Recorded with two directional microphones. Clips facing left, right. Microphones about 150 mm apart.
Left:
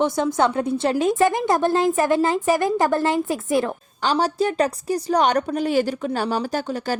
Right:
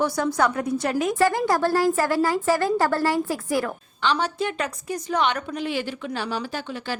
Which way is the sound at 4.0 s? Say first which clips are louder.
Left 4 dB; 40° left (ahead or behind).